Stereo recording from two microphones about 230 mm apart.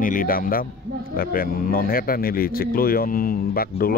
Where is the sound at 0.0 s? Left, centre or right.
Left.